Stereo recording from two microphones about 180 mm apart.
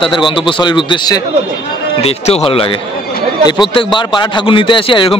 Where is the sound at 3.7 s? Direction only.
25° left (ahead or behind).